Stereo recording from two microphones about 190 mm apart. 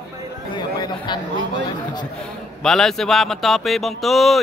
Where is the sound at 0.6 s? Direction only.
20° left (ahead or behind).